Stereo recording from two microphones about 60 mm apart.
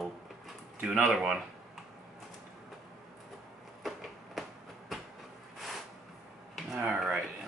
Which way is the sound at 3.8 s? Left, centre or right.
Centre.